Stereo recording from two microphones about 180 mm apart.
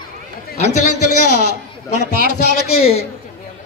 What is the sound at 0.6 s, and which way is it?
Speech, 40° left (ahead or behind).